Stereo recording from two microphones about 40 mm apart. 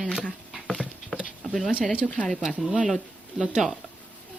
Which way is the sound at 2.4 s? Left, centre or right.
Centre.